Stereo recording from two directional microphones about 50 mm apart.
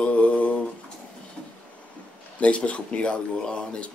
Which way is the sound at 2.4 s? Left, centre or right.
Left.